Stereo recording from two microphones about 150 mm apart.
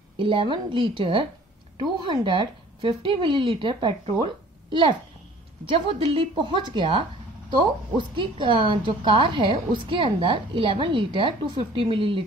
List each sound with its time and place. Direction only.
0.2 s a woman's voice: 35° right (ahead or behind)
8.2 s a woman's voice: 35° right (ahead or behind)